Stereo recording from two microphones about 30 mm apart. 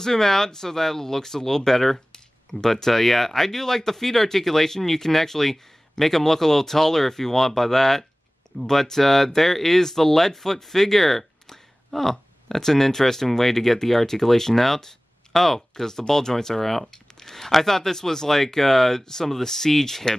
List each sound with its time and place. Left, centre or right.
0.0 s speech: centre
15.7 s speech: centre